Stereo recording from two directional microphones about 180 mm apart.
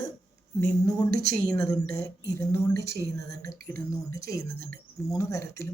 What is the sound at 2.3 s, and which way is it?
Speech, 15° left (ahead or behind).